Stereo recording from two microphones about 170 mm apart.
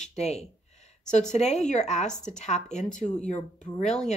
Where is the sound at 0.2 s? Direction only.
40° left (ahead or behind).